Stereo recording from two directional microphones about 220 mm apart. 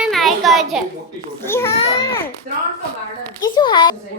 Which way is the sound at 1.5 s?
10° left (ahead or behind).